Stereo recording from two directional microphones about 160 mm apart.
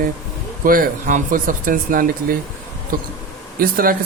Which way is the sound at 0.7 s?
60° right (ahead or behind).